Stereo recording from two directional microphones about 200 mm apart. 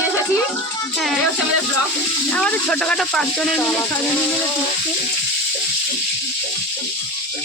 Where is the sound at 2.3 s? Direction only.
5° left (ahead or behind).